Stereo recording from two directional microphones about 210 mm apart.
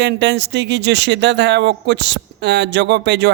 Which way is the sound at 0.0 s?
55° right (ahead or behind).